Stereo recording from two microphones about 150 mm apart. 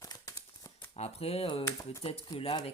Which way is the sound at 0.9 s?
45° left (ahead or behind).